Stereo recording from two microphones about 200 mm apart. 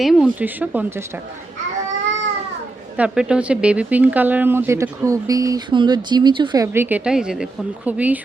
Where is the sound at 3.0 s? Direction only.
5° right (ahead or behind); by 6.6 s 25° right (ahead or behind).